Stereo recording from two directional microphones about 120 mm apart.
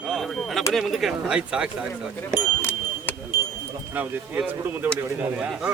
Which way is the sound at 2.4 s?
15° left (ahead or behind).